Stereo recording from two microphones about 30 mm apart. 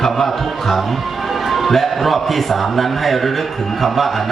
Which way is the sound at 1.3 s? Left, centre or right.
Centre.